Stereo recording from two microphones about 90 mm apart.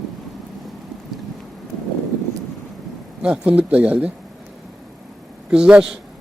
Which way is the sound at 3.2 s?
15° right (ahead or behind).